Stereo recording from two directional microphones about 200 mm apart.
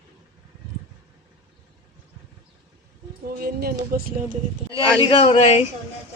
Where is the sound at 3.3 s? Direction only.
50° right (ahead or behind).